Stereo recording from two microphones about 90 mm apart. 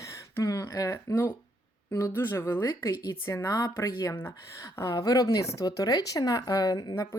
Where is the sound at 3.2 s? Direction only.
35° left (ahead or behind).